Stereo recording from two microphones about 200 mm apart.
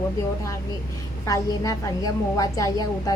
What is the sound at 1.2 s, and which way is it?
A woman's voice, 15° left (ahead or behind).